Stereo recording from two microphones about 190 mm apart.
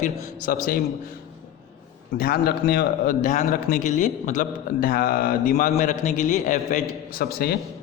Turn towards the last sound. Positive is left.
turn(degrees=55)  # may be behind; listen again after turning